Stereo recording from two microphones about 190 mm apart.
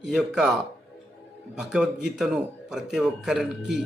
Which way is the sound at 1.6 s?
5° right (ahead or behind).